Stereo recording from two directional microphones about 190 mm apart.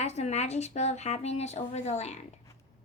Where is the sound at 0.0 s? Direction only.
35° left (ahead or behind).